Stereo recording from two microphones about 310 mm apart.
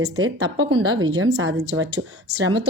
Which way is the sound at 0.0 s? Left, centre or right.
Right.